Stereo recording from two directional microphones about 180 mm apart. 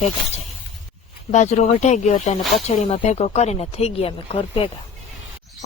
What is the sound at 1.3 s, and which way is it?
Speech, 40° left (ahead or behind).